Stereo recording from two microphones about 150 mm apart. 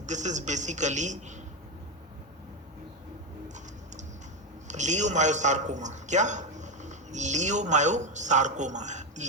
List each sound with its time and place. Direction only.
0.0 s a man's voice: 55° right (ahead or behind)
4.7 s a man's voice: 50° right (ahead or behind)